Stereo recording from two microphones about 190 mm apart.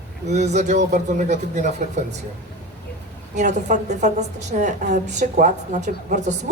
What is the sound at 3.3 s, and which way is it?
Speech, 40° right (ahead or behind).